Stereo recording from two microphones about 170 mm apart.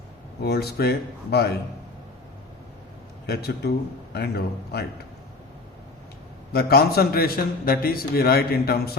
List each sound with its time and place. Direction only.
0.4 s speech: 70° left (ahead or behind)
3.2 s speech: 70° left (ahead or behind)
6.5 s a man's voice: 65° left (ahead or behind)